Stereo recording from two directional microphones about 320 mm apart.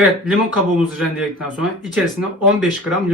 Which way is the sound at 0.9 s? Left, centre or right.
Centre.